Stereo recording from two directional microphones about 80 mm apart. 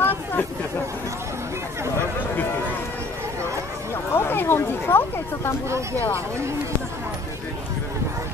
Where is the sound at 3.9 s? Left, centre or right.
Left.